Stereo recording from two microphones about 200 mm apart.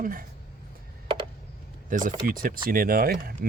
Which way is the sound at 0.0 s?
45° right (ahead or behind).